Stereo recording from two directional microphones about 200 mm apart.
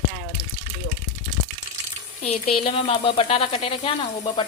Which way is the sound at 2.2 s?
30° left (ahead or behind).